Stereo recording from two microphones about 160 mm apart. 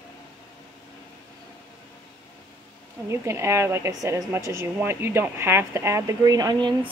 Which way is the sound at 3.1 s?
15° right (ahead or behind).